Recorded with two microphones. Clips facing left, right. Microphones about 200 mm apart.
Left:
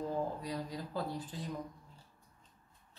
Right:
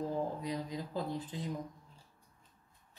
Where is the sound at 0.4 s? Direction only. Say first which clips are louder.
Right 2 dB; 20° right (ahead or behind).